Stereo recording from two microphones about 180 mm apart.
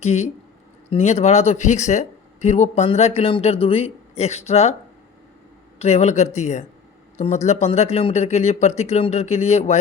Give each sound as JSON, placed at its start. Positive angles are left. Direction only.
{"t": 0.0, "sound": "speech", "side_deg": 40}
{"t": 5.8, "sound": "speech", "side_deg": 35}